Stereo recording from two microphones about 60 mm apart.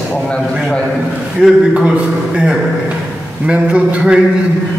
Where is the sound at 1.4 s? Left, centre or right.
Centre.